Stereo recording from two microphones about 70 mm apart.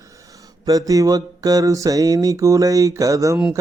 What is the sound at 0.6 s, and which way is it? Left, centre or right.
Mantra, right.